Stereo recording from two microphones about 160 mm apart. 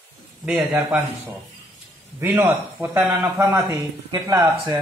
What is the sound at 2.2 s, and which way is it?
Speech, 10° right (ahead or behind).